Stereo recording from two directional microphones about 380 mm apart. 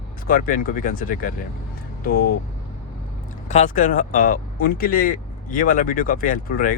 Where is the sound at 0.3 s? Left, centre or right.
Left.